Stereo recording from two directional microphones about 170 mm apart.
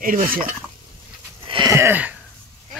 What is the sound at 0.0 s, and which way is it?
Speech, 55° right (ahead or behind).